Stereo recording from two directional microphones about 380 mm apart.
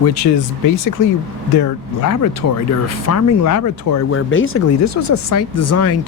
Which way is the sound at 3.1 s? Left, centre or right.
Left.